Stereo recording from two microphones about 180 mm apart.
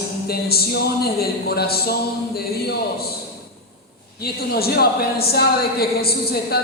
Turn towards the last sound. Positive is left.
turn(degrees=60)  # may be behind; listen again after turning